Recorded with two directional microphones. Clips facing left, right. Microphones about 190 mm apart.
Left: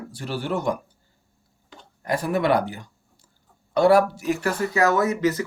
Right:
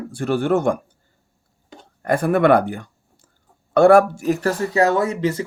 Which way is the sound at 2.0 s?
55° right (ahead or behind).